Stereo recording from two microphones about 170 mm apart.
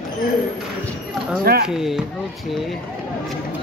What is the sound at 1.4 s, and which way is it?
Speech, 65° right (ahead or behind).